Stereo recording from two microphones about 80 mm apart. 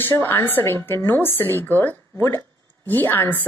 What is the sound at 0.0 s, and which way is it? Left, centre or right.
A woman's voice, left.